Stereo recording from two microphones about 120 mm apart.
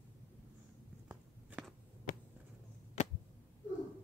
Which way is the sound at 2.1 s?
90° left.